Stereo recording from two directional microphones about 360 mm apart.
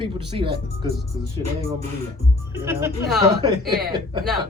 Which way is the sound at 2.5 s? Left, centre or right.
Centre.